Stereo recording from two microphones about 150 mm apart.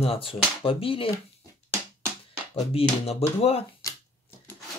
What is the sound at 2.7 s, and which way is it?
Speech, 40° left (ahead or behind).